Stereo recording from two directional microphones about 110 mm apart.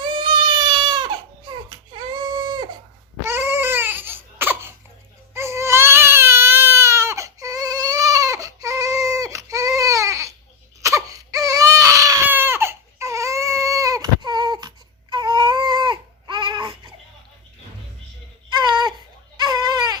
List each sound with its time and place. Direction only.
0.0 s baby cry: 45° right (ahead or behind)
3.2 s crying: 20° right (ahead or behind)
5.3 s baby cry: 25° right (ahead or behind); by 16.9 s 45° right (ahead or behind)
18.5 s baby cry: 40° right (ahead or behind)
19.4 s goat: 40° right (ahead or behind)